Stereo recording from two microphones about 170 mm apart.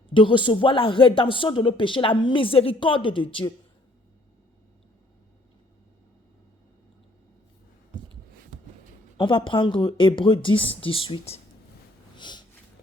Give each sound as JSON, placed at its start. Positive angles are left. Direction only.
{"t": 0.1, "sound": "speech", "side_deg": 30}
{"t": 9.1, "sound": "speech", "side_deg": 30}
{"t": 12.1, "sound": "snort", "side_deg": 25}